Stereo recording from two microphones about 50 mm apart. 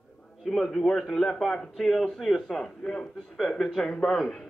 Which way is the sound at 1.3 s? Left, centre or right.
Centre.